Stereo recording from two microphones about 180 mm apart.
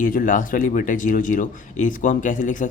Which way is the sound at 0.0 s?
50° left (ahead or behind).